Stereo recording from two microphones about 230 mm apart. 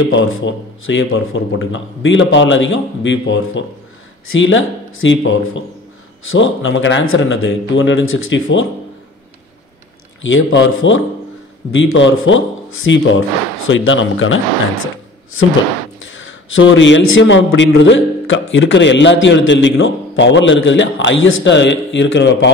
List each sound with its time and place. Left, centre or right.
0.0 s a man's voice: left
10.2 s speech: left
16.1 s a man's voice: left